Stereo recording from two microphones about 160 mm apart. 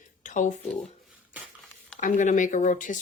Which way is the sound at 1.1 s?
10° right (ahead or behind).